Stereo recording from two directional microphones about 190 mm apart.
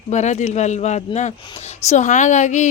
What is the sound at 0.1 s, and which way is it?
A woman's voice, 40° left (ahead or behind).